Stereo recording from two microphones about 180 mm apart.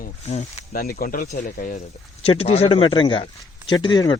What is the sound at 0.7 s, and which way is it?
Speech, 55° left (ahead or behind).